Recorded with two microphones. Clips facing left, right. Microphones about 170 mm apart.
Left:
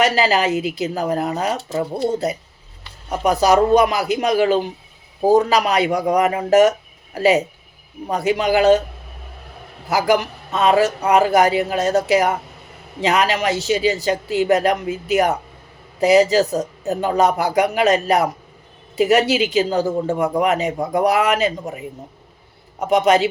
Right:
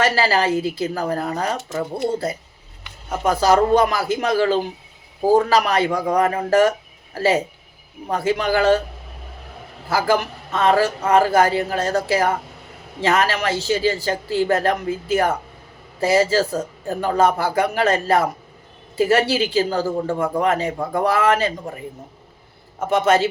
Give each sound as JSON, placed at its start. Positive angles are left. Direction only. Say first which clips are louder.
{"t": 0.0, "sound": "a man's voice", "louder": "left 2 dB", "side_deg": 20}
{"t": 1.5, "sound": "speech", "louder": "left 2 dB", "side_deg": 30}
{"t": 2.0, "sound": "a man's voice", "louder": "left 2 dB", "side_deg": 20}
{"t": 9.9, "sound": "a man's voice", "louder": "left 2 dB", "side_deg": 20}